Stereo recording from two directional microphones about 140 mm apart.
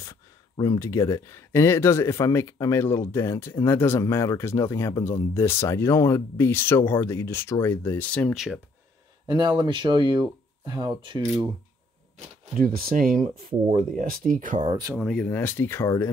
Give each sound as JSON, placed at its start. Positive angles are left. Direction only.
{"t": 0.0, "sound": "speech", "side_deg": 25}
{"t": 9.3, "sound": "speech", "side_deg": -30}
{"t": 12.5, "sound": "speech", "side_deg": -90}
{"t": 14.6, "sound": "speech", "side_deg": -30}
{"t": 15.0, "sound": "speech", "side_deg": 0}
{"t": 15.2, "sound": "speech", "side_deg": 15}